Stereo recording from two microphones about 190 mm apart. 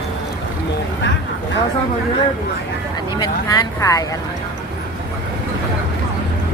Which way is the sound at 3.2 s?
15° left (ahead or behind).